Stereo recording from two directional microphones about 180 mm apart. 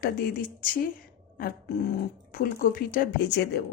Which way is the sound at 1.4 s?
55° left (ahead or behind).